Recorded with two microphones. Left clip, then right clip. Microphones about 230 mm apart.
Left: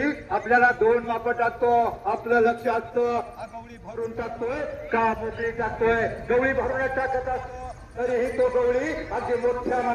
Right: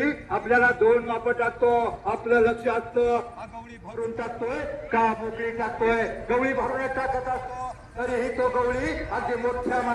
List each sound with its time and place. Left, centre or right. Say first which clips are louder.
0.0 s a man's voice: even; centre
4.9 s a man's voice: even; right